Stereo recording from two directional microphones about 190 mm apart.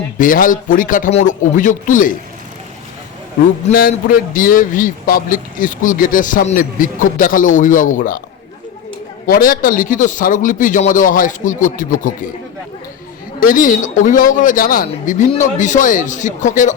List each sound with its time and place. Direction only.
0.2 s a man's voice: 45° left (ahead or behind)
3.7 s a man's voice: 50° left (ahead or behind)
9.2 s a man's voice: 45° left (ahead or behind)
13.4 s a man's voice: 45° left (ahead or behind)